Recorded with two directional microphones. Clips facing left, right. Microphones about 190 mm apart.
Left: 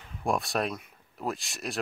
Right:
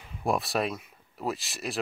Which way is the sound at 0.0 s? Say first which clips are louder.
Right 1 dB; 5° right (ahead or behind).